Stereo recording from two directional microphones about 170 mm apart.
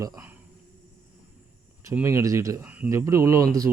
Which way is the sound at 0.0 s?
15° right (ahead or behind).